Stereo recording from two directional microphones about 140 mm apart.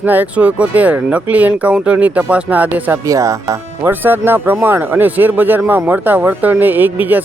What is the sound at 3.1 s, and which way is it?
Speech, 25° right (ahead or behind).